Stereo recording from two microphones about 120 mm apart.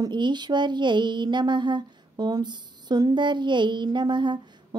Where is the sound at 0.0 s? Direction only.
40° right (ahead or behind).